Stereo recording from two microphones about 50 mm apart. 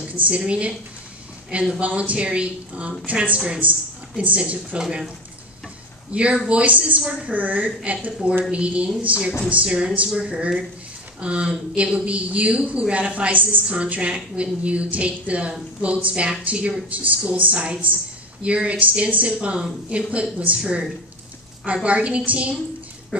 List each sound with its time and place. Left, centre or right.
0.0 s a woman's voice: right
1.8 s speech: right
6.1 s speech: right
7.2 s a woman's voice: right
21.8 s speech: right